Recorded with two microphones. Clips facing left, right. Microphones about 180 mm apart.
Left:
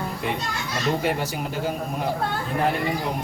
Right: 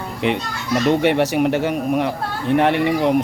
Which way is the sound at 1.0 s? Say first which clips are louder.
Right 9 dB; 75° right (ahead or behind).